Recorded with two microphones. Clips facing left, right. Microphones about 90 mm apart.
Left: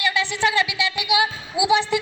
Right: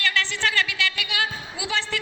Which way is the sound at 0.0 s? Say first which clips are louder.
Left 4 dB; 15° left (ahead or behind).